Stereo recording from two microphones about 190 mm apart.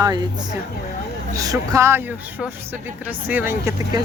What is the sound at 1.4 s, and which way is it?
Speech, 15° right (ahead or behind).